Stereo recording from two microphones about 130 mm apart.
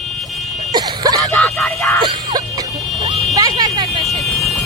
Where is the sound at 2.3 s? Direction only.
30° right (ahead or behind).